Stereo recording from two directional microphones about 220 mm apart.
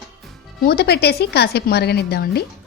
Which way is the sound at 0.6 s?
45° left (ahead or behind).